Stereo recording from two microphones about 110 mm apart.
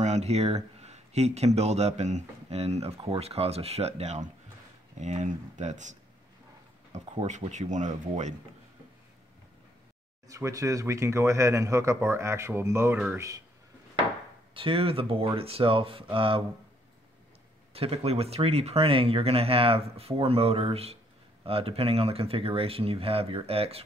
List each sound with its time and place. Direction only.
0.0 s speech: 80° right
4.9 s speech: 90° right
10.2 s speech: 30° right (ahead or behind)
14.5 s speech: 55° right (ahead or behind)
17.7 s speech: 65° right (ahead or behind)